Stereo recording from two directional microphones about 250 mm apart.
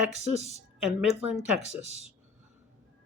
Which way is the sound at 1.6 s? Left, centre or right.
Right.